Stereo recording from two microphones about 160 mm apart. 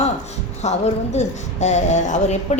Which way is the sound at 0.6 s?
45° left (ahead or behind).